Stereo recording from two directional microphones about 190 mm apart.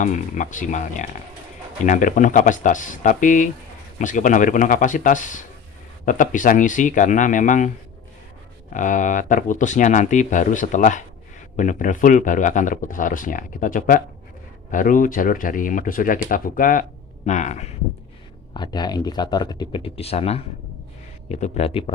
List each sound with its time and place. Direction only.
0.0 s speech: 40° left (ahead or behind)
8.7 s speech: 45° left (ahead or behind)
18.5 s speech: 20° left (ahead or behind)